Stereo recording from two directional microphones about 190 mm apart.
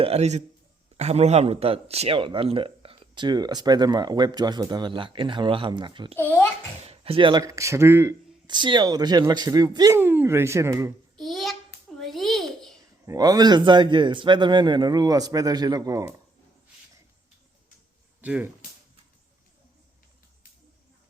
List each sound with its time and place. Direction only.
0.0 s a man's voice: 35° right (ahead or behind)
6.1 s a child's voice: 10° left (ahead or behind)
6.8 s speech: 30° right (ahead or behind); by 8.1 s 10° right (ahead or behind)
8.4 s speech: 25° right (ahead or behind)
11.2 s a sound: centre (ahead or behind)
11.9 s babbling: centre (ahead or behind)
13.1 s speech: 20° right (ahead or behind)
18.2 s speech: 5° right (ahead or behind)